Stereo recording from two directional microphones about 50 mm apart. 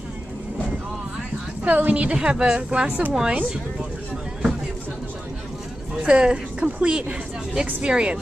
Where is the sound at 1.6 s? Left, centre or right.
Right.